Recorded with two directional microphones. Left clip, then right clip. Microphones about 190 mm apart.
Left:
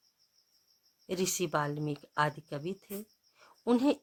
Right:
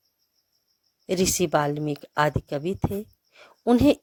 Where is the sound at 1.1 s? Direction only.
30° right (ahead or behind).